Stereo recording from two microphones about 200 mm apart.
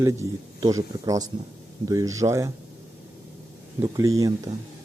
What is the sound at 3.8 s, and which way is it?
Speech, 15° right (ahead or behind).